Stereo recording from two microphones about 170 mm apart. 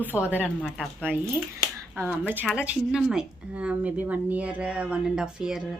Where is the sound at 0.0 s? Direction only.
10° right (ahead or behind).